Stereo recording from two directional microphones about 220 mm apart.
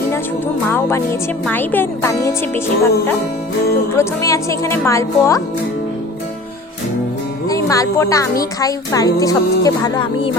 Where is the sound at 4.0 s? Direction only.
15° left (ahead or behind).